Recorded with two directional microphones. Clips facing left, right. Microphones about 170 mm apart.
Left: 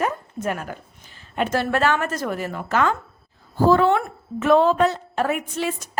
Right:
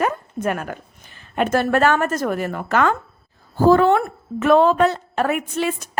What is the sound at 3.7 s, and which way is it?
A woman's voice, 45° right (ahead or behind).